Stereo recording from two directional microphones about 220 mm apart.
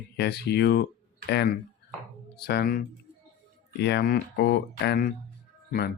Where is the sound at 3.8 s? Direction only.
50° left (ahead or behind).